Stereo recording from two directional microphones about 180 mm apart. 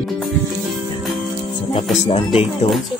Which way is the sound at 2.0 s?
30° left (ahead or behind).